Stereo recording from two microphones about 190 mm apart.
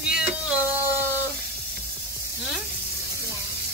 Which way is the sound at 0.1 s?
5° right (ahead or behind).